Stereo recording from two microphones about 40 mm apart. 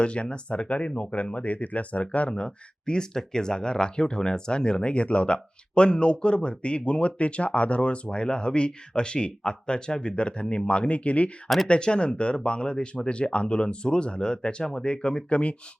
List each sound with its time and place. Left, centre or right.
0.0 s speech: left
11.4 s speech: centre
11.7 s speech: left